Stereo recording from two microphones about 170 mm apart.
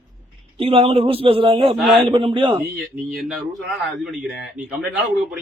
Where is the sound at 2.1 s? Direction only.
30° right (ahead or behind).